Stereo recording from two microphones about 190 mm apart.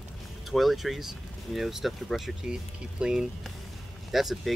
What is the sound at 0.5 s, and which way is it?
Speech, centre (ahead or behind).